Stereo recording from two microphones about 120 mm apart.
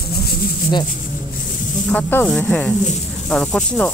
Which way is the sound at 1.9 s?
15° left (ahead or behind).